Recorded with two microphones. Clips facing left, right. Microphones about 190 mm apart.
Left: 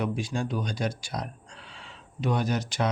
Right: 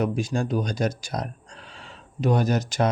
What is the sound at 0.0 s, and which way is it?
Speech, 45° right (ahead or behind).